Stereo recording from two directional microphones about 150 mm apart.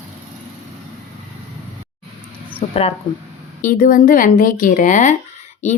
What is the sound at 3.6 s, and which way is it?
Speech, 65° left (ahead or behind).